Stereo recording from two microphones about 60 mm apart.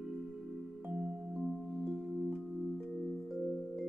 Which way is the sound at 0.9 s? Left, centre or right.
Right.